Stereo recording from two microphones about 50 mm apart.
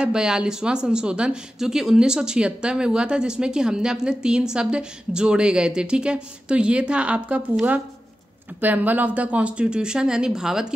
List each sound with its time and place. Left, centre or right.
0.0 s a woman's voice: centre
8.5 s a woman's voice: right; by 10.7 s centre